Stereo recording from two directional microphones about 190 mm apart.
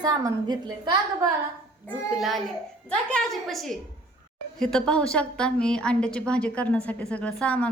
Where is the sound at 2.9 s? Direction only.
5° left (ahead or behind).